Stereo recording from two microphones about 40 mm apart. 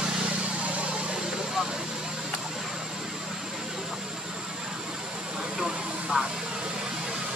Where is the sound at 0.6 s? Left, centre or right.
Right.